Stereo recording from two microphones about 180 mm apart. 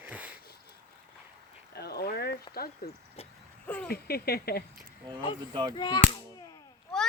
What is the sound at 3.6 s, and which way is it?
Speech, 10° left (ahead or behind).